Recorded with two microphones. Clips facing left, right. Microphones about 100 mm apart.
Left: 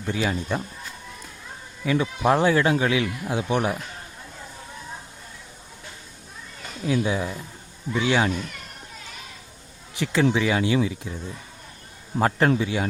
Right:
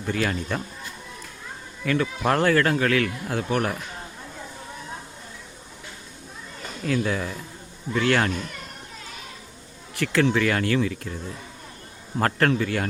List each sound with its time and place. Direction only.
0.1 s a man's voice: 10° left (ahead or behind)
1.8 s a man's voice: 10° left (ahead or behind)
6.8 s a man's voice: 15° left (ahead or behind)
9.9 s a man's voice: 15° left (ahead or behind)
12.2 s a man's voice: 15° left (ahead or behind)